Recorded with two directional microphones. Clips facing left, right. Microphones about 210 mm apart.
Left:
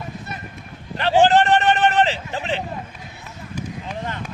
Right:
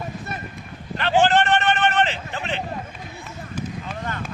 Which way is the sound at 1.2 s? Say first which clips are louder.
Left 4 dB; 35° left (ahead or behind).